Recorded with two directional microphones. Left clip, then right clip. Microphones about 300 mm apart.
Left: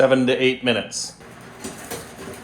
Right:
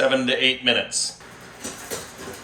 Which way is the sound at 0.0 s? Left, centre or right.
Centre.